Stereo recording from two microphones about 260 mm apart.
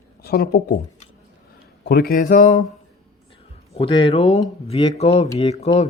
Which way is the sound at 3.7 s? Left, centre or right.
Centre.